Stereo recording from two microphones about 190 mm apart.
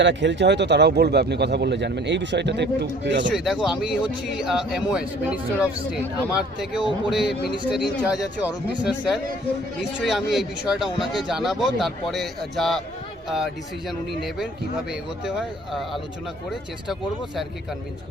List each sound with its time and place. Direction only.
0.0 s speech: 70° right (ahead or behind)
3.3 s a man's voice: 5° right (ahead or behind)